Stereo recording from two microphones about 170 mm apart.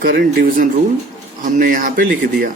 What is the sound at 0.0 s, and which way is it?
Speech, 60° right (ahead or behind).